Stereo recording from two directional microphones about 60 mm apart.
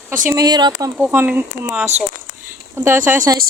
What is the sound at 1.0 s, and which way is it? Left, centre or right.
Speech, right.